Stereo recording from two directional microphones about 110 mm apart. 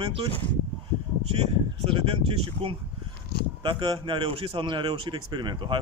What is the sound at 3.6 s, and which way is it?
A man's voice, 45° right (ahead or behind).